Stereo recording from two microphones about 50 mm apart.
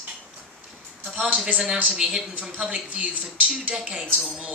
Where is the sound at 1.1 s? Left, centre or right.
Right.